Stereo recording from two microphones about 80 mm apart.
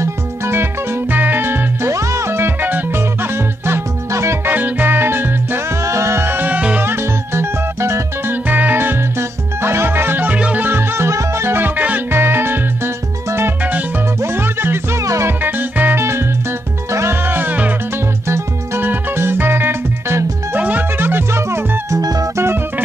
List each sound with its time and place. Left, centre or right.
0.0 s music: right
4.5 s music: right
5.9 s music: right; by 6.8 s centre
6.8 s music: right
8.5 s music: right
15.4 s music: right
21.9 s music: right